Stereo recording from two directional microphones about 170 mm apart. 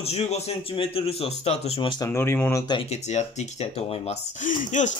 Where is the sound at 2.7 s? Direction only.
35° left (ahead or behind).